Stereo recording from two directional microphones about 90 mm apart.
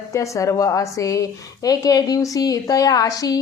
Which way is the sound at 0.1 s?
35° left (ahead or behind).